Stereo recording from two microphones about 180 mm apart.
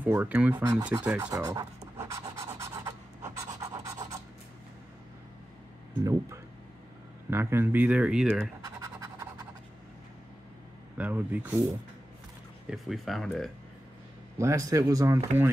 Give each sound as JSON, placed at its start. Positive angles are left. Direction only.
{"t": 0.0, "sound": "speech", "side_deg": -10}
{"t": 2.0, "sound": "pant", "side_deg": -15}
{"t": 6.0, "sound": "speech", "side_deg": -15}
{"t": 8.6, "sound": "scratch", "side_deg": -20}
{"t": 11.0, "sound": "speech", "side_deg": -10}
{"t": 12.6, "sound": "speech", "side_deg": 0}
{"t": 14.4, "sound": "speech", "side_deg": -15}